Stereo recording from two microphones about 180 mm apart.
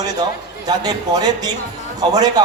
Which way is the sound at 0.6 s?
20° right (ahead or behind).